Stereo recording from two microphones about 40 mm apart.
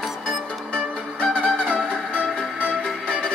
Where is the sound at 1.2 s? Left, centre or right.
Left.